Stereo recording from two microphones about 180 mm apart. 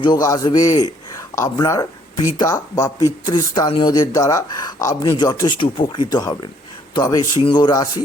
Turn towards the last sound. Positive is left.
turn(degrees=25)  # may be behind; listen again after turning